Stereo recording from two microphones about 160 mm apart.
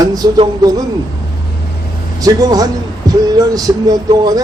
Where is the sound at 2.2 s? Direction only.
25° right (ahead or behind).